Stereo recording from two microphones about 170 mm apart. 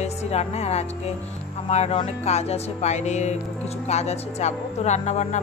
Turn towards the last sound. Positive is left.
turn(degrees=45)  # may be behind; listen again after turning